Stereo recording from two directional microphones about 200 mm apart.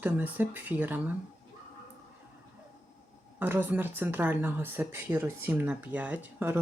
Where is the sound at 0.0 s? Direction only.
10° right (ahead or behind).